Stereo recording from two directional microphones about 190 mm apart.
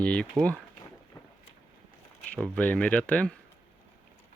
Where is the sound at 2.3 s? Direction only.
5° left (ahead or behind).